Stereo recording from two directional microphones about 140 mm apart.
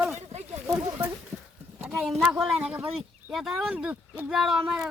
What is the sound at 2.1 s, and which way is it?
Speech, centre (ahead or behind).